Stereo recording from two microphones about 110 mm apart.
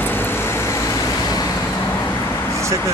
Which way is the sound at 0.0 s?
20° left (ahead or behind).